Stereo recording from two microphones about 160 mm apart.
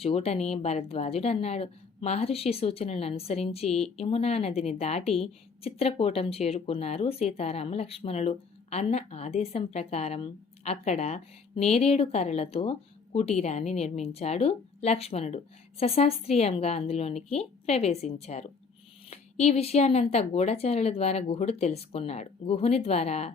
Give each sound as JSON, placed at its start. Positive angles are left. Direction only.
{"t": 0.0, "sound": "a woman's voice", "side_deg": 35}